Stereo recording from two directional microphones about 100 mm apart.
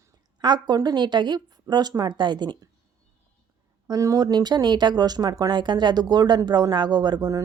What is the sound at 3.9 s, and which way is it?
Speech, 35° right (ahead or behind).